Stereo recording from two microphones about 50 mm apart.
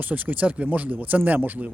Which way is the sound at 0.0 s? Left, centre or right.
Right.